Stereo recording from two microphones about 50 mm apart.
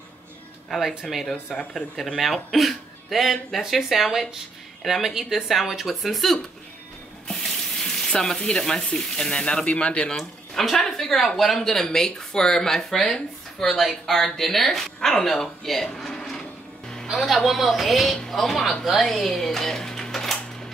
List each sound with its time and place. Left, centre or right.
0.7 s speech: centre
1.5 s speech: centre
2.0 s speech: centre
7.4 s speech: centre
10.1 s speech: centre